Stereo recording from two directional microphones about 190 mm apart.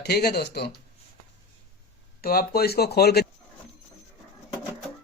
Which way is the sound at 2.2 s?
50° left (ahead or behind).